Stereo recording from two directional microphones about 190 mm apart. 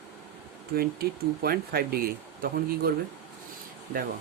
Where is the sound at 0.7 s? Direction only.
55° right (ahead or behind).